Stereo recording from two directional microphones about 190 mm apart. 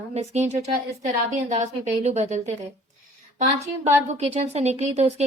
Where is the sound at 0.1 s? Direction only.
35° right (ahead or behind).